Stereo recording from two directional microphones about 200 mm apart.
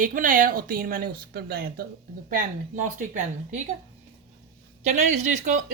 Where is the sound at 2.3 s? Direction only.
40° right (ahead or behind).